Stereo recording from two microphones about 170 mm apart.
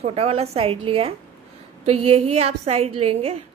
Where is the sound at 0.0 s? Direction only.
35° right (ahead or behind).